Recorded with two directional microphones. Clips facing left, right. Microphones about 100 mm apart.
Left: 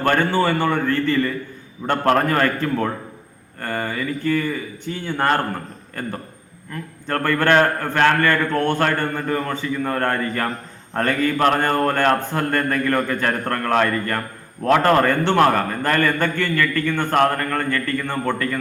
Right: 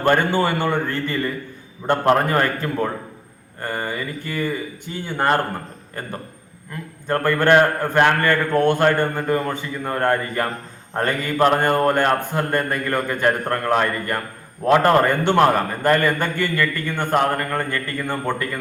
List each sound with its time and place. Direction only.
0.0 s a man's voice: 15° right (ahead or behind)
1.9 s a man's voice: 20° right (ahead or behind)
7.1 s a man's voice: 15° right (ahead or behind)